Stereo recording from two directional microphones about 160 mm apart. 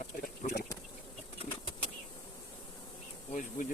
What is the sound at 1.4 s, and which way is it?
Bird flight, 35° left (ahead or behind).